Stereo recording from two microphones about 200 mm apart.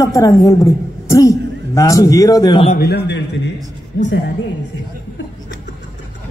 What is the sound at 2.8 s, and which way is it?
Mantra, 55° left (ahead or behind).